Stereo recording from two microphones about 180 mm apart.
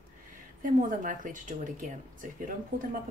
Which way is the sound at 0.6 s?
45° right (ahead or behind).